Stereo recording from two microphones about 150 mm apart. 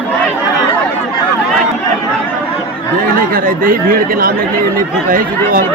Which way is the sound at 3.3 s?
70° right (ahead or behind).